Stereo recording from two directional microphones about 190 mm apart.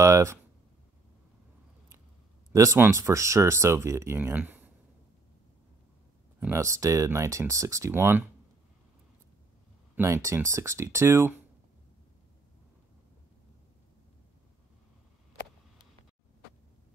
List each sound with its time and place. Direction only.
0.0 s a sound: 15° right (ahead or behind)
2.5 s speech: 15° right (ahead or behind)
6.4 s speech: 15° right (ahead or behind)
9.9 s speech: 15° right (ahead or behind)